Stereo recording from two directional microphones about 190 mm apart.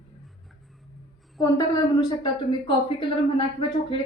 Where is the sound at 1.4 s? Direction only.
20° left (ahead or behind).